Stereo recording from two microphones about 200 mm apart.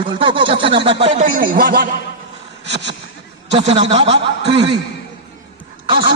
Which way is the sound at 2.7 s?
60° right (ahead or behind).